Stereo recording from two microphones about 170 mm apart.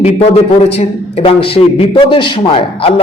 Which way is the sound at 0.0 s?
40° left (ahead or behind).